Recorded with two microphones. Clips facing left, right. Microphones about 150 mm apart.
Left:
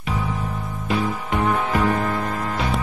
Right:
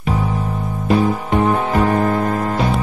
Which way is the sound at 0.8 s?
40° right (ahead or behind).